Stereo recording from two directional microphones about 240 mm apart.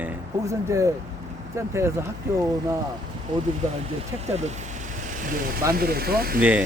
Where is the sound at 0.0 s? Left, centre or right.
Centre.